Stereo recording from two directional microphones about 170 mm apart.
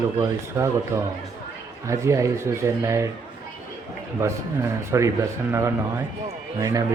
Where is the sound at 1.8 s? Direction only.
15° right (ahead or behind).